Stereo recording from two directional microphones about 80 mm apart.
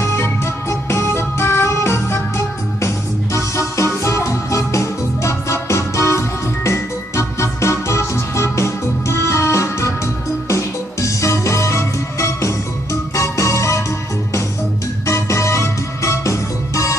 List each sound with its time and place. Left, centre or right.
0.2 s music: left
15.0 s music: left